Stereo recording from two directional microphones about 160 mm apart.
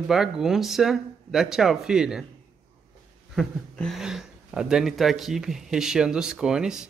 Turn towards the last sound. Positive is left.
turn(degrees=-5)  # may be behind; listen again after turning